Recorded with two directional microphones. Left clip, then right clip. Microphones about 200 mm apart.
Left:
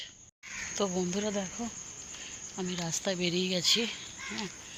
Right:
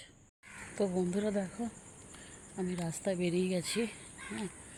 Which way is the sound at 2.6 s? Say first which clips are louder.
Left 3 dB; 10° right (ahead or behind).